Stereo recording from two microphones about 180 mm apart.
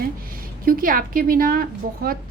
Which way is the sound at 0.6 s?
50° right (ahead or behind).